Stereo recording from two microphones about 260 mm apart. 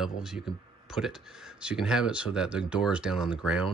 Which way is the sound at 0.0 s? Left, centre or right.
Centre.